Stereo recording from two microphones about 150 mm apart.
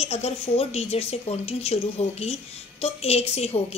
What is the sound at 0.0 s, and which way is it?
A woman's voice, 45° left (ahead or behind).